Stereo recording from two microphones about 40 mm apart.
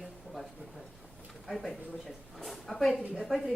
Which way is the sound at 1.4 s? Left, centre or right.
Centre.